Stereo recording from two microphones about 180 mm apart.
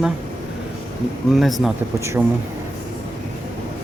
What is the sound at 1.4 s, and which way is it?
Speech, centre (ahead or behind).